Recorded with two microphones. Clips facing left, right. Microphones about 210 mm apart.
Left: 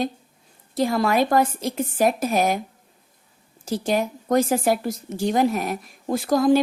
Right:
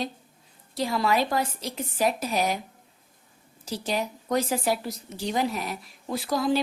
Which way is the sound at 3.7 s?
50° left (ahead or behind).